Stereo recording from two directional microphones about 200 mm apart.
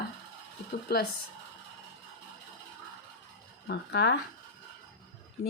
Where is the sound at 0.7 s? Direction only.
55° left (ahead or behind).